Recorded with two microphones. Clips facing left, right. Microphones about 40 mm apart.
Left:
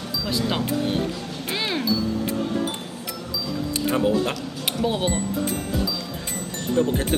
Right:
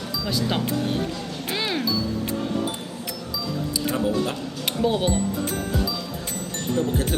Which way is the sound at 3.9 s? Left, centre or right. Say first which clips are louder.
Left 3 dB; left.